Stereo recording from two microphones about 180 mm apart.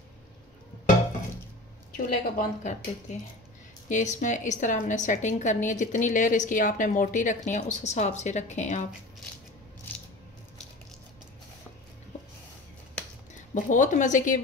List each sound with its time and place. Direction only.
2.0 s a woman's voice: 45° left (ahead or behind)
13.3 s speech: 45° left (ahead or behind)